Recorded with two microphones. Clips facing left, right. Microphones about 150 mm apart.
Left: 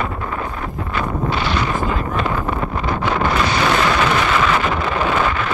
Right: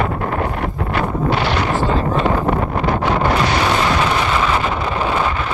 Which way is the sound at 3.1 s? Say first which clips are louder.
Right 1 dB; 35° right (ahead or behind).